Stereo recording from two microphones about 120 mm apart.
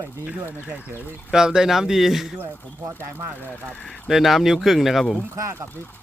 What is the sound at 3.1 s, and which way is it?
Speech, 15° right (ahead or behind).